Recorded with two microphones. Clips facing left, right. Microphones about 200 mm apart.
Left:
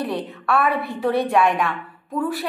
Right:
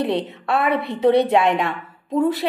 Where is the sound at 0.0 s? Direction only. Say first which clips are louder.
Right 4 dB; 20° right (ahead or behind).